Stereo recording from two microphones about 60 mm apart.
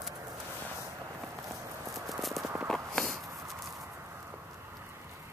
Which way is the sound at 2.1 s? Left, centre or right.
Centre.